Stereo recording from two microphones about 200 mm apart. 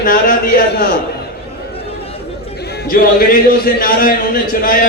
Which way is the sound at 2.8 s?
50° left (ahead or behind).